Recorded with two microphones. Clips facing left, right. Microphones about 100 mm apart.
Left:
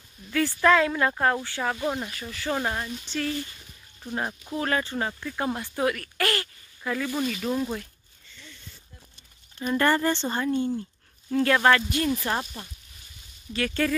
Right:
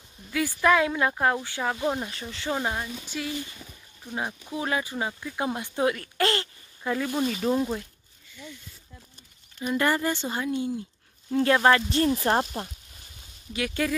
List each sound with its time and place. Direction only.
0.3 s speech: 10° right (ahead or behind)
2.0 s speech: 25° right (ahead or behind)
2.5 s speech: 10° right (ahead or behind)
7.6 s a sound: 10° right (ahead or behind)
9.6 s speech: 10° right (ahead or behind)
11.3 s speech: 20° right (ahead or behind)
12.2 s speech: 35° right (ahead or behind)
13.5 s speech: 15° right (ahead or behind)